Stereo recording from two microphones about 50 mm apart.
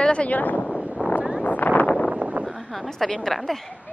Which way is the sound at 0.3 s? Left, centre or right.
Left.